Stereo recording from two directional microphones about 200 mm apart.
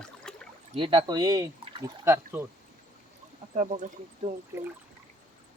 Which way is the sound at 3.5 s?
35° right (ahead or behind).